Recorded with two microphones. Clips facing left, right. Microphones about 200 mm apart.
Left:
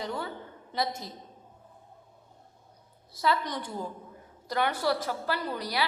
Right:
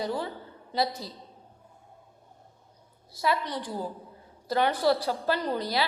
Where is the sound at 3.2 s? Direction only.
25° right (ahead or behind).